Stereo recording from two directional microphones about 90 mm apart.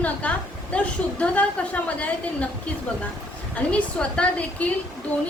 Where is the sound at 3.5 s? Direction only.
10° left (ahead or behind).